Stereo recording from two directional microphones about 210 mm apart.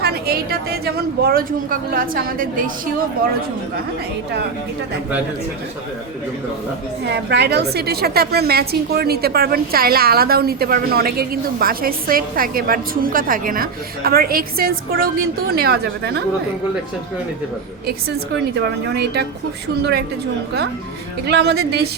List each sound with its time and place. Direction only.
0.0 s a woman's voice: 50° right (ahead or behind)
7.0 s a woman's voice: 55° right (ahead or behind)
18.5 s a woman's voice: 50° right (ahead or behind)
21.2 s a woman's voice: 55° right (ahead or behind)